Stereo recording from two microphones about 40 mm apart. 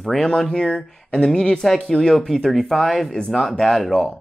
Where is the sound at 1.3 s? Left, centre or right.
Centre.